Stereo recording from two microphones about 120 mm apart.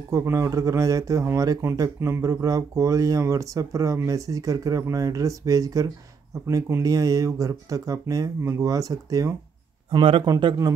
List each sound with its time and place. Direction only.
0.1 s a man's voice: 25° right (ahead or behind)